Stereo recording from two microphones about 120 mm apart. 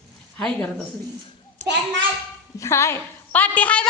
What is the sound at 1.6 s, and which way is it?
Speech, 85° right.